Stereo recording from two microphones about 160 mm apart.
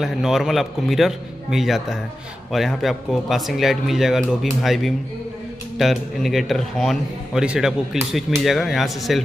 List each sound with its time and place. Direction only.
0.0 s a man's voice: centre (ahead or behind)